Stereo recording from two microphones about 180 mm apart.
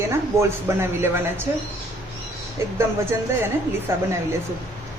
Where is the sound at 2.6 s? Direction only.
15° right (ahead or behind).